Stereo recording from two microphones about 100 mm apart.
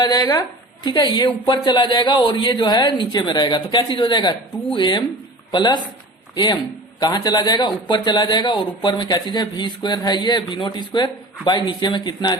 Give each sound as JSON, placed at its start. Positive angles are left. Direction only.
{"t": 0.0, "sound": "a woman's voice", "side_deg": 40}